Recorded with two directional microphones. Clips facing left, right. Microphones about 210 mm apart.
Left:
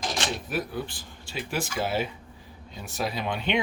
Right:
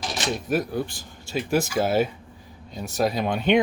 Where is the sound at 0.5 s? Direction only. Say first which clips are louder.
Right 6 dB; 45° right (ahead or behind).